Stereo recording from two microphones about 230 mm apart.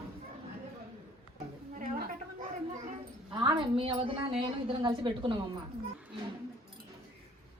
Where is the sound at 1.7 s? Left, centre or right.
Right.